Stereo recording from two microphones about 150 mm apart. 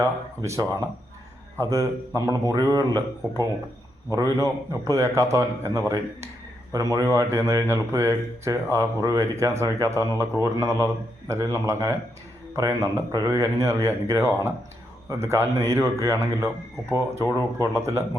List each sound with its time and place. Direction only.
0.0 s speech: 20° right (ahead or behind)